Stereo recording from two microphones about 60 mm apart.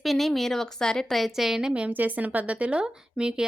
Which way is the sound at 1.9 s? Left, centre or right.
Right.